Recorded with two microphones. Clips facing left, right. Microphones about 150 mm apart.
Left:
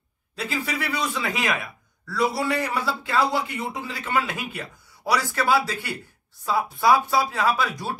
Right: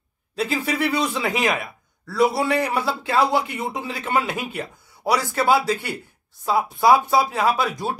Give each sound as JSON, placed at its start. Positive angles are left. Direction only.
{"t": 0.4, "sound": "speech", "side_deg": -25}